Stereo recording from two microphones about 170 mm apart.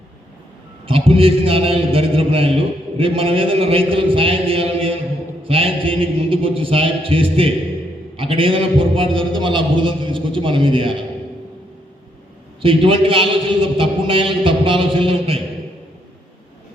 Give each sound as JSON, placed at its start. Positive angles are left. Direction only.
{"t": 0.9, "sound": "a man's voice", "side_deg": -35}
{"t": 12.6, "sound": "a man's voice", "side_deg": -30}